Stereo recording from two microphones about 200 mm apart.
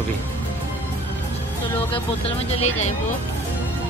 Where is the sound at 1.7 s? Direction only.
30° left (ahead or behind).